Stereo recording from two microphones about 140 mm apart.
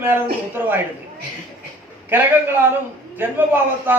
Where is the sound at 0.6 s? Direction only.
15° right (ahead or behind).